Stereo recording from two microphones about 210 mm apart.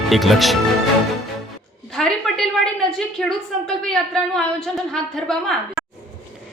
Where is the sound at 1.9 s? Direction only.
Centre (ahead or behind).